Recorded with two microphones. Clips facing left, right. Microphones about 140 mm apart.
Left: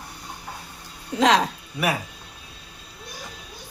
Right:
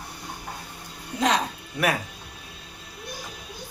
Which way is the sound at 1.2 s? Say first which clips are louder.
Left 5 dB; 90° left.